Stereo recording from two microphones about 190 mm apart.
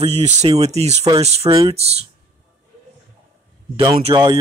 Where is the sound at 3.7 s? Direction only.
25° right (ahead or behind).